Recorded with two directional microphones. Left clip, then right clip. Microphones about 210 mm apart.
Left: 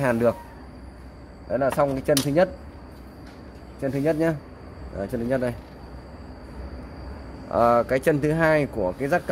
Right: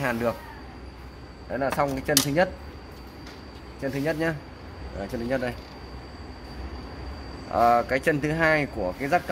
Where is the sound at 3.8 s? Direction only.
50° left (ahead or behind).